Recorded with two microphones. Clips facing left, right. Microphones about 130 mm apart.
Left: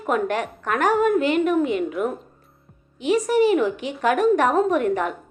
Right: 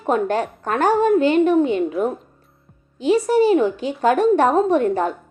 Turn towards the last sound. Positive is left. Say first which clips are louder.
# right 3 dB
turn(degrees=-30)  # may be behind; listen again after turning